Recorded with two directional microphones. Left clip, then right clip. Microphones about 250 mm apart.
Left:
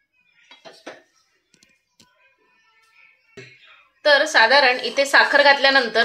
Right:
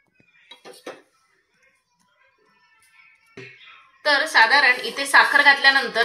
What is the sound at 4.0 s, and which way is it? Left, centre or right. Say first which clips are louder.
A woman's voice: left 2 dB; left.